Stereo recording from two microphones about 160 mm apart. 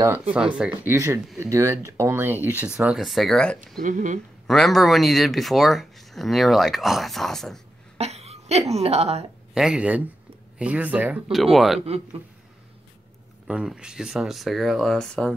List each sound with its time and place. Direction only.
0.6 s speech: 10° right (ahead or behind)
3.7 s speech: 50° right (ahead or behind)
4.5 s speech: centre (ahead or behind)
8.0 s speech: 40° right (ahead or behind)
9.5 s speech: 5° right (ahead or behind)
13.5 s speech: 5° right (ahead or behind)